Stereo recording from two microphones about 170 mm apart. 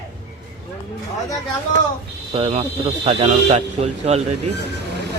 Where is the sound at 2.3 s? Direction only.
35° right (ahead or behind).